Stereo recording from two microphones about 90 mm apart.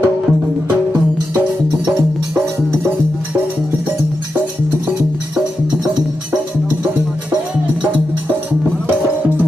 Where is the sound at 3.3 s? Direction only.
30° right (ahead or behind).